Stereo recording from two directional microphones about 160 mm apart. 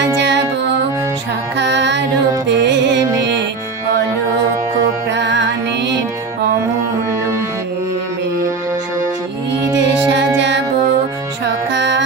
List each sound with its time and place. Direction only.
0.2 s music: 90° right
1.5 s music: 90° right
5.0 s music: 90° right
10.1 s music: 90° right